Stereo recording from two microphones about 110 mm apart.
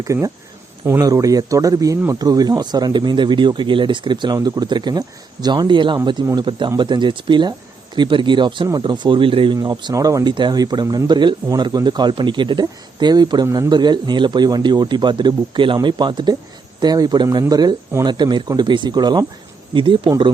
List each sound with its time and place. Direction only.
0.0 s speech: 30° right (ahead or behind); by 9.6 s 50° right (ahead or behind)
9.6 s speech: 40° right (ahead or behind)